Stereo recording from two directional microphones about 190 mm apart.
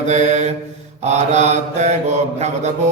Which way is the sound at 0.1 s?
35° right (ahead or behind).